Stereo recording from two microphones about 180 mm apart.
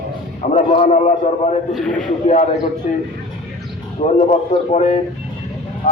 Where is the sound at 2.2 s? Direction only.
40° left (ahead or behind).